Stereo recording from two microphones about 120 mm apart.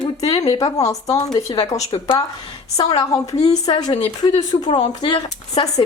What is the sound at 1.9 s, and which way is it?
Speech, 45° left (ahead or behind).